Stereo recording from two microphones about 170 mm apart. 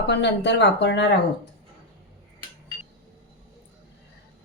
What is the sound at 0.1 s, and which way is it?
Speech, 90° left.